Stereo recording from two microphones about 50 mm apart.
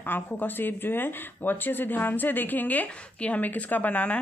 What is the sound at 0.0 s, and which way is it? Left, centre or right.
Speech, left.